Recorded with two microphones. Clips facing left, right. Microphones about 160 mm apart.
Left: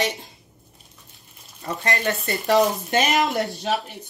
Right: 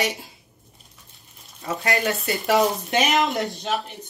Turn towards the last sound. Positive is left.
turn(degrees=0)  # may be behind; listen again after turning